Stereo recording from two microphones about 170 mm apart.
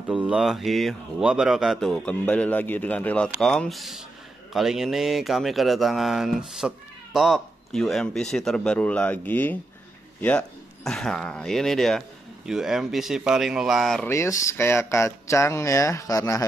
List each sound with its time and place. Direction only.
0.1 s speech: 5° right (ahead or behind)
14.0 s speech: 15° left (ahead or behind)